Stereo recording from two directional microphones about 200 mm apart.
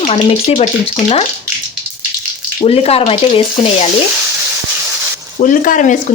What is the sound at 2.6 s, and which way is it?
Speech, 30° left (ahead or behind).